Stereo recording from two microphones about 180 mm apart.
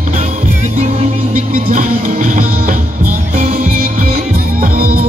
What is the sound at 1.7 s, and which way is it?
Music, 45° right (ahead or behind).